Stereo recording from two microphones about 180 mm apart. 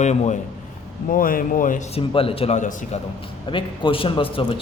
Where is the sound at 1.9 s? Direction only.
30° left (ahead or behind).